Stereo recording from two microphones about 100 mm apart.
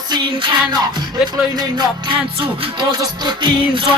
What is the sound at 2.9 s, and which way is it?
Music, 50° right (ahead or behind).